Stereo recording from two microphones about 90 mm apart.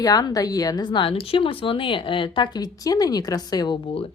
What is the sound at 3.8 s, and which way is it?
Speech, 90° left.